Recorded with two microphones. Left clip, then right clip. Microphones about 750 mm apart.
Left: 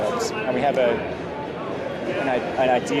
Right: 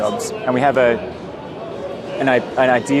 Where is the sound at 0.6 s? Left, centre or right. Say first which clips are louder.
Right 6 dB; right.